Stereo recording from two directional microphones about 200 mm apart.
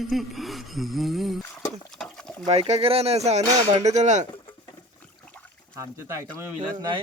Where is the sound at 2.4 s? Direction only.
30° right (ahead or behind).